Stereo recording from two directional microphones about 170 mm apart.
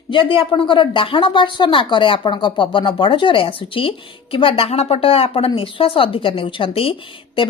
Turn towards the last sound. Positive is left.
turn(degrees=30)  # may be behind; listen again after turning